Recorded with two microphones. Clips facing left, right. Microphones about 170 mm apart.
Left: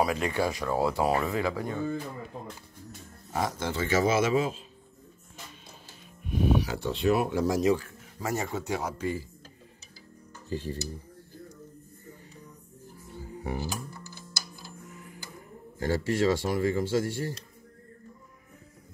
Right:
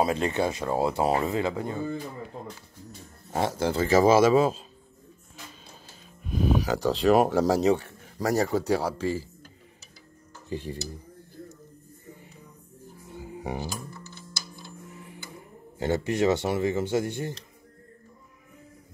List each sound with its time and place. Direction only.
0.0 s speech: 25° right (ahead or behind)
3.3 s speech: 30° right (ahead or behind)
6.6 s speech: 90° right
7.3 s speech: 35° right (ahead or behind)
10.5 s cutlery: 15° right (ahead or behind)
13.1 s music: 15° right (ahead or behind)
15.8 s speech: 20° right (ahead or behind)